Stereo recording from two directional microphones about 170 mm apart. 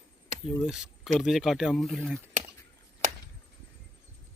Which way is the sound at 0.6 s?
5° right (ahead or behind).